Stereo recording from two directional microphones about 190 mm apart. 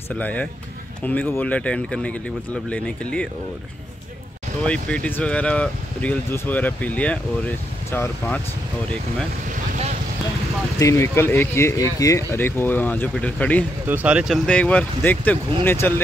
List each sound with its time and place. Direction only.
0.1 s speech: 5° left (ahead or behind)
4.6 s speech: 5° left (ahead or behind)
9.5 s vehicle: 35° right (ahead or behind)
10.8 s speech: 15° left (ahead or behind)
13.8 s speech: 10° right (ahead or behind); by 15.9 s 10° left (ahead or behind)